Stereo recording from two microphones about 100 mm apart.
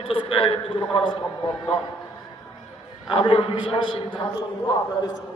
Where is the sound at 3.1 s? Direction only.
65° left (ahead or behind).